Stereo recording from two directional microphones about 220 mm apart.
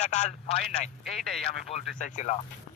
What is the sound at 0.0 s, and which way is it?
Speech, 30° left (ahead or behind).